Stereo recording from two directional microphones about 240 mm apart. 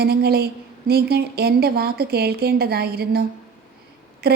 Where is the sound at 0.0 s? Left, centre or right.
Right.